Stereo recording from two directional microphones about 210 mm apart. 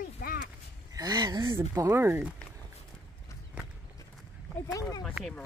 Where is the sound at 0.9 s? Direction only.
20° right (ahead or behind).